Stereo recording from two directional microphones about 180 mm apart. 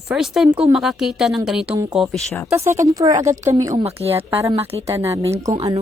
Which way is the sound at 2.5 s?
15° right (ahead or behind).